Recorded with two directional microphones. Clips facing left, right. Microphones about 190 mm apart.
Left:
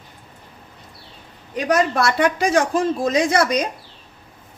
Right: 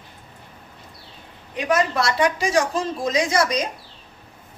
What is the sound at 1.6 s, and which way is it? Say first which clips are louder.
A woman's voice: left 2 dB; 50° left (ahead or behind).